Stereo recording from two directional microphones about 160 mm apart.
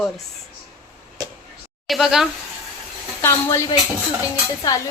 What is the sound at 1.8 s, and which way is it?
Speech, centre (ahead or behind).